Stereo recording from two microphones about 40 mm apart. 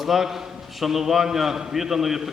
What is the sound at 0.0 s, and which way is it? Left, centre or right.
A man's voice, centre.